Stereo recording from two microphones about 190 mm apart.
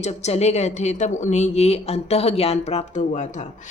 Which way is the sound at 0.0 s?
35° left (ahead or behind).